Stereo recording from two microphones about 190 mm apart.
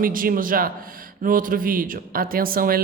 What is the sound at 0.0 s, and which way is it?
Speech, 50° right (ahead or behind).